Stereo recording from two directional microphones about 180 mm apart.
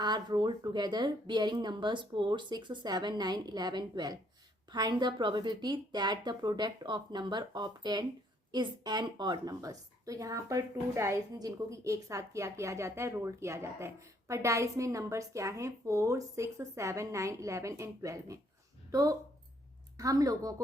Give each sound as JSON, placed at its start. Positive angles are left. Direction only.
{"t": 0.0, "sound": "a woman's voice", "side_deg": -25}